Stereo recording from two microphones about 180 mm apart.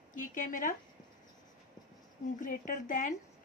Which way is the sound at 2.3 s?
50° left (ahead or behind).